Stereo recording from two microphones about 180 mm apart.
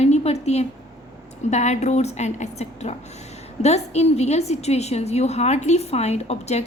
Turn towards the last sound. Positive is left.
turn(degrees=35)  # may be behind; listen again after turning